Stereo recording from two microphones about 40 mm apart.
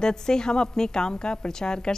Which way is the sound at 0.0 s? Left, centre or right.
Centre.